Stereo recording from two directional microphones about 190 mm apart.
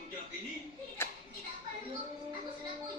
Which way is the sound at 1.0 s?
10° left (ahead or behind).